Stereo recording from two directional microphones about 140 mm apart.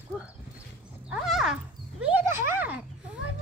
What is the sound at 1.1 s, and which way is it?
Speech, 5° right (ahead or behind).